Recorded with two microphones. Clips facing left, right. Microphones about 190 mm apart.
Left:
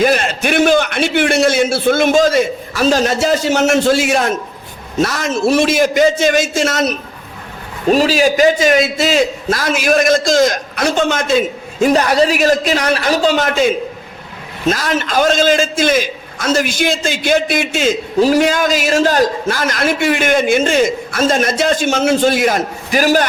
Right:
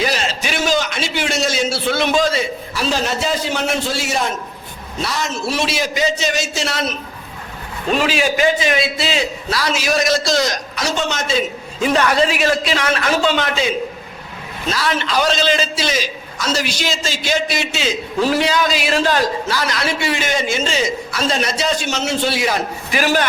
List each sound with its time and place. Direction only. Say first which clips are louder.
0.0 s a man's voice: left 7 dB; 55° left (ahead or behind)